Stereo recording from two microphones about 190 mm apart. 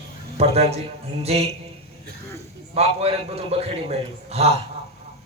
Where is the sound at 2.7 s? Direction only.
30° right (ahead or behind).